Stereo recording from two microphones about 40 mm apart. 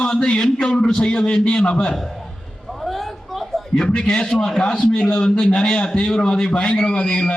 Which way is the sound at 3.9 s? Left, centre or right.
Left.